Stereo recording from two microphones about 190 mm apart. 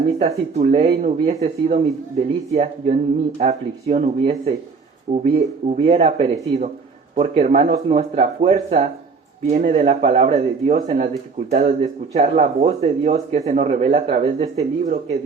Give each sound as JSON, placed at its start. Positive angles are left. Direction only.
{"t": 0.2, "sound": "speech", "side_deg": -35}